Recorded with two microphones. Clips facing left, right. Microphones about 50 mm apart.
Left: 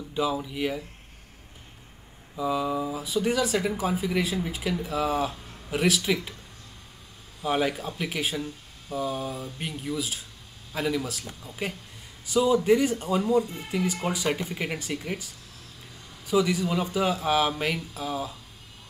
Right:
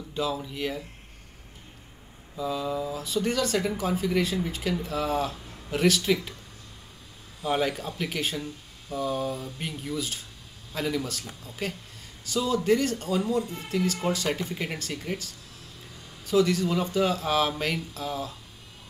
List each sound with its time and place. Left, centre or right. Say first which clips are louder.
0.1 s speech: left 2 dB; centre
2.3 s speech: left 3 dB; centre
7.4 s speech: left 1 dB; centre
16.3 s speech: right 1 dB; centre